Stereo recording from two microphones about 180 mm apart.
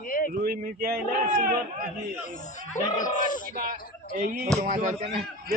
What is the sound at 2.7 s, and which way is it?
Speech, 45° left (ahead or behind).